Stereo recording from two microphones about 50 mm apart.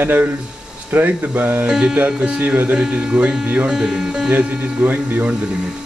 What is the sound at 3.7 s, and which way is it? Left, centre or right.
Speech, centre.